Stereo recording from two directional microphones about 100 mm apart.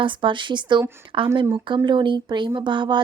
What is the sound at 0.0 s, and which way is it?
Speech, 55° right (ahead or behind).